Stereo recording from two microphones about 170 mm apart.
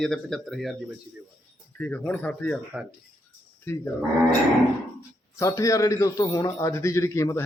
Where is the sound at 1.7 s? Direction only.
10° left (ahead or behind).